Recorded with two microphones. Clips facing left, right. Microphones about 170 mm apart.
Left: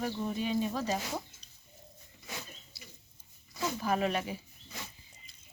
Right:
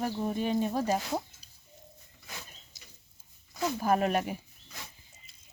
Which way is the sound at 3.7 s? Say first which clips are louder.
Right 4 dB; 45° right (ahead or behind).